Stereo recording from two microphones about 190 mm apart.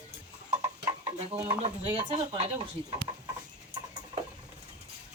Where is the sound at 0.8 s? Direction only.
15° right (ahead or behind).